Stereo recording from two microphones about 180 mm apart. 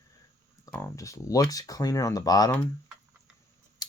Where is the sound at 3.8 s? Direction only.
20° left (ahead or behind).